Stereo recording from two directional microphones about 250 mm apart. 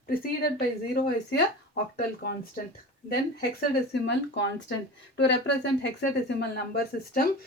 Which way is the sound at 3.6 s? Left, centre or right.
Left.